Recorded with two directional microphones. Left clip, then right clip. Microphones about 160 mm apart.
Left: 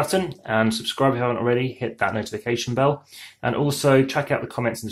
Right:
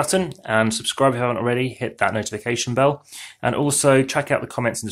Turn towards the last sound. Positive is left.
turn(degrees=-40)  # may be behind; listen again after turning